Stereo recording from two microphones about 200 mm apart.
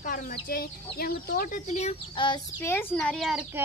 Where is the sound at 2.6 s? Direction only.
10° left (ahead or behind).